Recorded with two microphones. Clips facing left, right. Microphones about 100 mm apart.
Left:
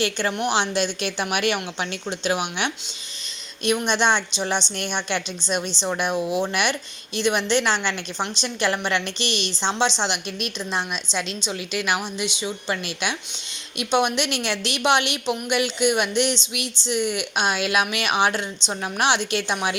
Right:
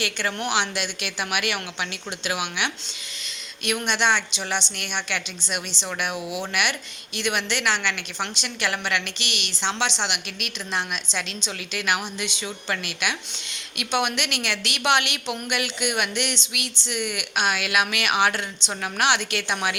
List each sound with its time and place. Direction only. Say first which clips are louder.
0.0 s a woman's voice: left 4 dB; 25° left (ahead or behind)
3.8 s a woman's voice: right 1 dB; 25° left (ahead or behind)